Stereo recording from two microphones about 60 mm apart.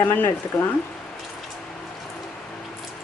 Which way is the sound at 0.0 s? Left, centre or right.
Left.